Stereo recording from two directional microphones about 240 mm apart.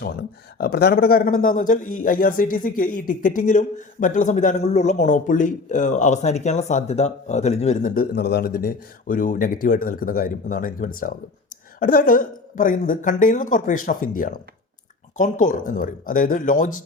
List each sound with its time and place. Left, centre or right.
0.0 s speech: left